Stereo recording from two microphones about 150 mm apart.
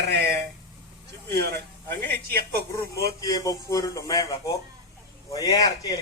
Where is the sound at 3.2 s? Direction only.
25° left (ahead or behind).